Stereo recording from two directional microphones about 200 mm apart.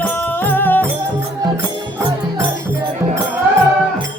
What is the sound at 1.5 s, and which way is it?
Music, 15° right (ahead or behind).